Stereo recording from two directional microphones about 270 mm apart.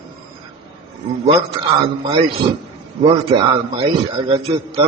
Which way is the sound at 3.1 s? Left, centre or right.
Centre.